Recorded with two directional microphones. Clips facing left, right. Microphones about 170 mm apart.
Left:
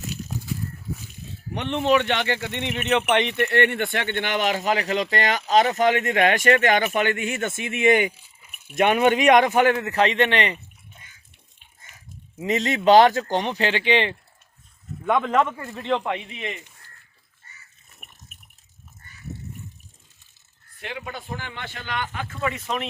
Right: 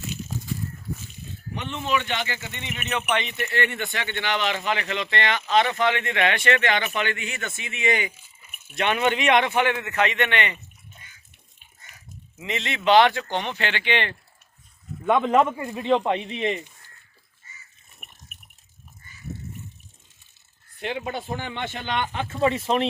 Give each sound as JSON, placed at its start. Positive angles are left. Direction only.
{"t": 1.5, "sound": "speech", "side_deg": 65}
{"t": 12.4, "sound": "speech", "side_deg": 40}
{"t": 15.0, "sound": "a man's voice", "side_deg": -5}
{"t": 16.0, "sound": "a man's voice", "side_deg": -25}
{"t": 20.7, "sound": "a man's voice", "side_deg": -25}